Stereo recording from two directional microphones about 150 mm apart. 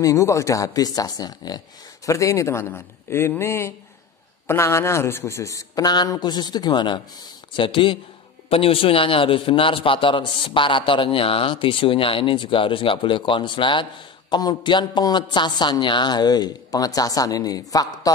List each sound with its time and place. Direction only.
0.0 s a woman's voice: 20° left (ahead or behind)